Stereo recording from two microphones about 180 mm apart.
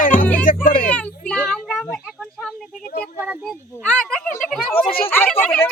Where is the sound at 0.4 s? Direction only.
50° left (ahead or behind).